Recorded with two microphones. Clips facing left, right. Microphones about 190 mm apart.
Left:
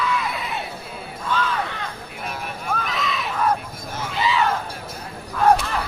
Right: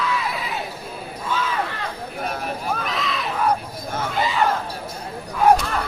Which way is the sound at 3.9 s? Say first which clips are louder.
Right 1 dB; 50° right (ahead or behind).